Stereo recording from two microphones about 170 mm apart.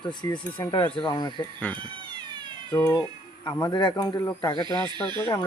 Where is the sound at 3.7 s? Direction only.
25° left (ahead or behind).